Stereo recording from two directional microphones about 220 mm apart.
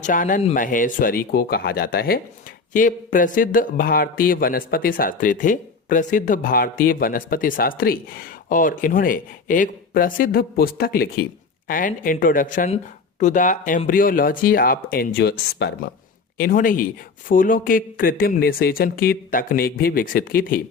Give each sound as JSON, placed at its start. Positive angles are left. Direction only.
{"t": 0.0, "sound": "a man's voice", "side_deg": 35}